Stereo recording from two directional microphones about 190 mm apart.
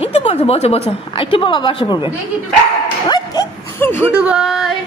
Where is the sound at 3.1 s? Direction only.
20° left (ahead or behind).